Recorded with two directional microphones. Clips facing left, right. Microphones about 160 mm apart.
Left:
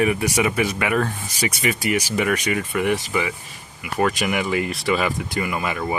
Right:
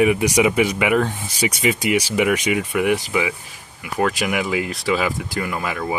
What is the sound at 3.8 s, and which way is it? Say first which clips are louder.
Speech: even; centre (ahead or behind).